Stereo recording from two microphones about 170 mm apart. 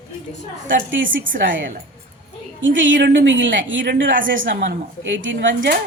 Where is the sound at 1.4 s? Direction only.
90° right.